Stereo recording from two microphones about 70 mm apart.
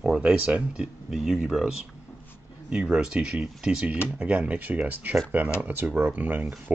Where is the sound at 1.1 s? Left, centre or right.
Centre.